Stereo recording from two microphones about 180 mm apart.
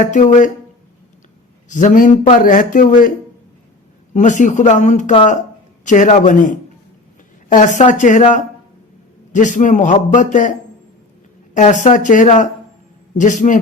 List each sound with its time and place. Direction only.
0.0 s a man's voice: 45° left (ahead or behind)
1.7 s a man's voice: 45° left (ahead or behind)
4.1 s a man's voice: 45° left (ahead or behind)
7.8 s a man's voice: 45° left (ahead or behind)
11.5 s a man's voice: 40° left (ahead or behind)